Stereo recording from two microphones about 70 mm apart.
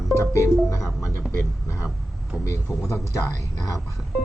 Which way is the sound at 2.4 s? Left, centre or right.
Left.